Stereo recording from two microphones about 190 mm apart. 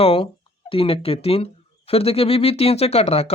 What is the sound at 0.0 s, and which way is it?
Speech, 30° left (ahead or behind).